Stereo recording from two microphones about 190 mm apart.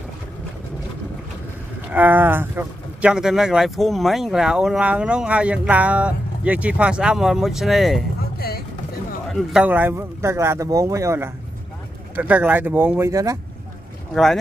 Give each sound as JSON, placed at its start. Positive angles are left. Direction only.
{"t": 1.9, "sound": "speech", "side_deg": -10}
{"t": 8.4, "sound": "music", "side_deg": 55}
{"t": 9.3, "sound": "speech", "side_deg": -5}
{"t": 14.1, "sound": "speech", "side_deg": 0}